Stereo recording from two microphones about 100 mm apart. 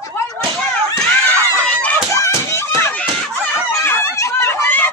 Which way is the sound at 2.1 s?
30° left (ahead or behind).